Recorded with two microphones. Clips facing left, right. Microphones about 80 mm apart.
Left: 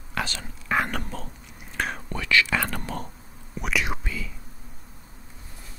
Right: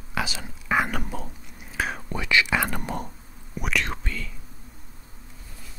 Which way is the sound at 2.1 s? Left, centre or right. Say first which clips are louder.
Even; centre.